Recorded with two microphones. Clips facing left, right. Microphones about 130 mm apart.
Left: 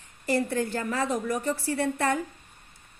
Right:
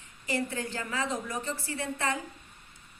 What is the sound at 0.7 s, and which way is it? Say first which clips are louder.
Speech: left 5 dB; 55° left (ahead or behind).